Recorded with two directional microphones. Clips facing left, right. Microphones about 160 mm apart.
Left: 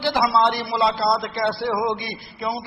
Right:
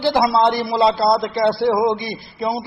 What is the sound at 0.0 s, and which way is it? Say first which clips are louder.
A man's voice: right 4 dB; 35° right (ahead or behind).